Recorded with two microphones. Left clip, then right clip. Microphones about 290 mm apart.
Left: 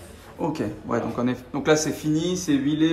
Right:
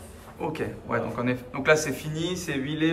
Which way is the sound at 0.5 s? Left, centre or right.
Centre.